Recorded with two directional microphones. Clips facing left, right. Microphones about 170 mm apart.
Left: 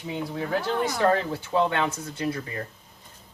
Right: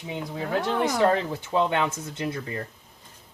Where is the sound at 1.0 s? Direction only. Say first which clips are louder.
Even; 25° right (ahead or behind).